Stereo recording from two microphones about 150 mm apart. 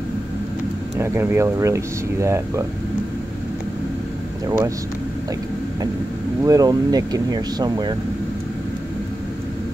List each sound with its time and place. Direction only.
0.9 s speech: 15° right (ahead or behind)
6.4 s speech: 25° right (ahead or behind)